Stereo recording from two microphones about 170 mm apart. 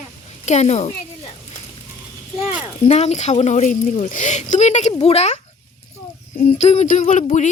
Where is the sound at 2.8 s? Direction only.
40° left (ahead or behind).